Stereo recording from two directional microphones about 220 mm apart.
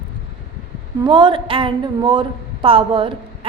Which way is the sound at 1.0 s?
20° right (ahead or behind).